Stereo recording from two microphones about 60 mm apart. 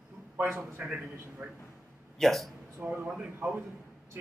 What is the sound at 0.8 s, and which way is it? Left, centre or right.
Speech, right.